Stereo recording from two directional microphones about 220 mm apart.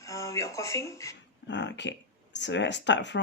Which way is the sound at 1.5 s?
55° left (ahead or behind).